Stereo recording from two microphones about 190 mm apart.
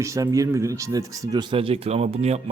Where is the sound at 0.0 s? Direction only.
15° right (ahead or behind).